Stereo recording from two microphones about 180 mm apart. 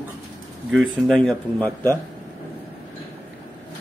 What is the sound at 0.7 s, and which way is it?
A man's voice, centre (ahead or behind).